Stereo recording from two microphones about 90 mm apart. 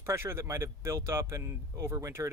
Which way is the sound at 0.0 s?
25° right (ahead or behind).